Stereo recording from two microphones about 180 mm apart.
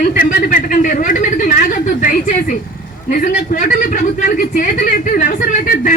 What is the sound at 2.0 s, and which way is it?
A man's voice, 45° left (ahead or behind).